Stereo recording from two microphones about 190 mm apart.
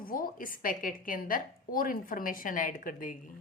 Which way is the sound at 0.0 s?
50° left (ahead or behind).